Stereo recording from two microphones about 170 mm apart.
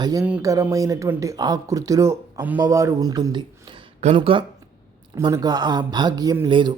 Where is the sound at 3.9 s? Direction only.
35° right (ahead or behind).